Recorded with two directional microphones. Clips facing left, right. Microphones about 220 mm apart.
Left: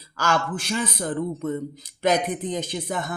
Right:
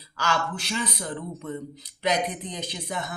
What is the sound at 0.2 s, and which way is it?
A man's voice, 50° left (ahead or behind).